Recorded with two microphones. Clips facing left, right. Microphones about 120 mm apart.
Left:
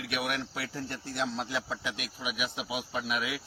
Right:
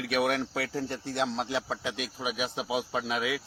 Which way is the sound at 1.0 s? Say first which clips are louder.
Right 2 dB; 90° right.